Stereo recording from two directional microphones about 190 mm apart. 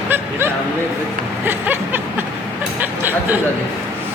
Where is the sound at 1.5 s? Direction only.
10° right (ahead or behind).